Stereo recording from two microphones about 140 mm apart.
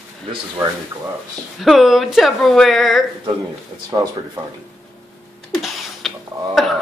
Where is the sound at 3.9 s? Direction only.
35° right (ahead or behind).